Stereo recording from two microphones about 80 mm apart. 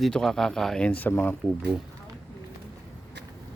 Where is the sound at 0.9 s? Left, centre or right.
Left.